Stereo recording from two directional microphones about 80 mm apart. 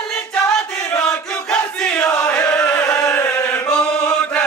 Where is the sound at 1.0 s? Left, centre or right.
Centre.